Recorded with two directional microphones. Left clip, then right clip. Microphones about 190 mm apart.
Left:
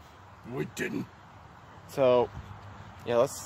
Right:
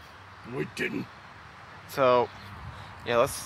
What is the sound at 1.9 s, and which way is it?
Speech, 20° left (ahead or behind).